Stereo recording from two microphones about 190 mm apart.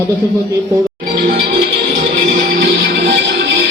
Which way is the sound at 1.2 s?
55° right (ahead or behind).